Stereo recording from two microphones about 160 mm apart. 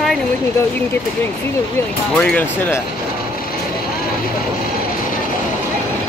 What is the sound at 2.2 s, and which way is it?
Speech, 10° left (ahead or behind).